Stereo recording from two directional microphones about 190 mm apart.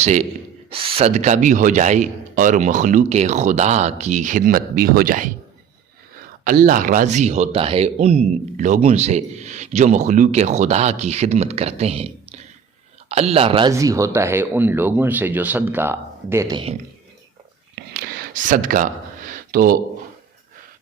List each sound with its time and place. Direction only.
0.0 s speech: 35° right (ahead or behind)
6.4 s speech: 45° right (ahead or behind); by 16.7 s 25° right (ahead or behind)
17.7 s a sound: 55° right (ahead or behind)